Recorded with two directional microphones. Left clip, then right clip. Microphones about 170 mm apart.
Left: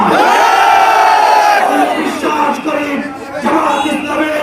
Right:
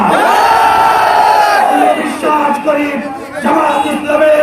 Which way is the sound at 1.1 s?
30° right (ahead or behind).